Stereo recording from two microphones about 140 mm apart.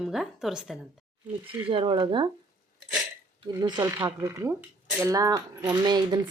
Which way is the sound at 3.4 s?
30° right (ahead or behind).